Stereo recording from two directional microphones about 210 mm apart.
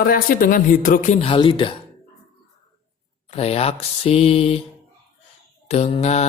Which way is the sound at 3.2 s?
30° left (ahead or behind).